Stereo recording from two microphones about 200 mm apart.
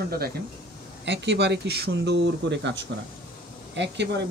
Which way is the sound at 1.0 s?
60° right (ahead or behind).